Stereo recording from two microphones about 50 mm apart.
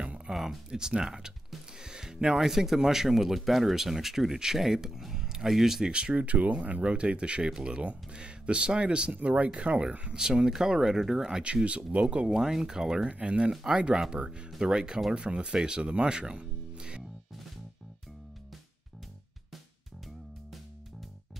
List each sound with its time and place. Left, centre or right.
0.3 s a sound: centre
0.7 s speech: centre
5.9 s speech: centre
6.1 s speech: right; by 11.4 s centre
11.4 s speech: right
12.4 s speech: centre
13.1 s speech: right